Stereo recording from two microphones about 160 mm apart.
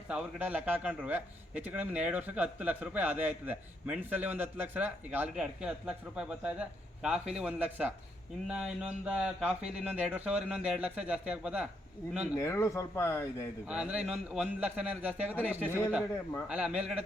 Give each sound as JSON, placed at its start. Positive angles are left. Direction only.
{"t": 0.1, "sound": "a man's voice", "side_deg": -10}
{"t": 12.4, "sound": "speech", "side_deg": 15}
{"t": 13.7, "sound": "a man's voice", "side_deg": -5}